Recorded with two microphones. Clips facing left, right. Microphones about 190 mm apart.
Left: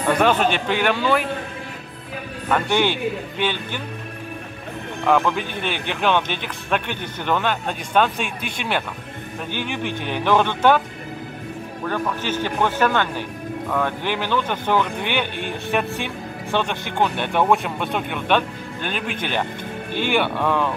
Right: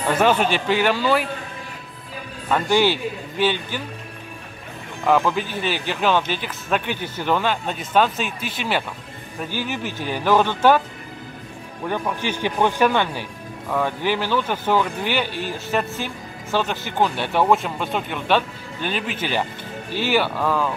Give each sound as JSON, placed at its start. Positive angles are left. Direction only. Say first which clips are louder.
{"t": 0.1, "sound": "speech", "louder": "even", "side_deg": -10}
{"t": 2.5, "sound": "speech", "louder": "right 2 dB", "side_deg": -5}
{"t": 5.0, "sound": "speech", "louder": "even", "side_deg": -5}
{"t": 5.4, "sound": "speech", "louder": "right 1 dB", "side_deg": 55}
{"t": 5.7, "sound": "speech", "louder": "even", "side_deg": -5}
{"t": 11.8, "sound": "speech", "louder": "right 1 dB", "side_deg": -15}
{"t": 18.8, "sound": "speech", "louder": "right 1 dB", "side_deg": 50}
{"t": 20.0, "sound": "speech", "louder": "even", "side_deg": -5}